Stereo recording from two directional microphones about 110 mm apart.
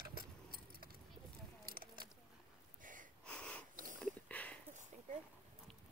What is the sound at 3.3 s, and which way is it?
Sniff, 10° left (ahead or behind).